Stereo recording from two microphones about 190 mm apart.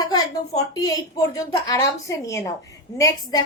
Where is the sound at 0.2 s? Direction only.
20° left (ahead or behind).